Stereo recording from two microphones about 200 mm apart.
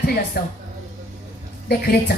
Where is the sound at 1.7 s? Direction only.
50° left (ahead or behind).